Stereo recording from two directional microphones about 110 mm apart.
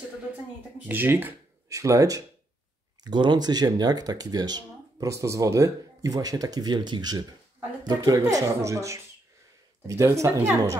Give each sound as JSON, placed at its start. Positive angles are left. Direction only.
{"t": 0.8, "sound": "speech", "side_deg": -20}
{"t": 1.7, "sound": "speech", "side_deg": -30}
{"t": 3.0, "sound": "speech", "side_deg": -40}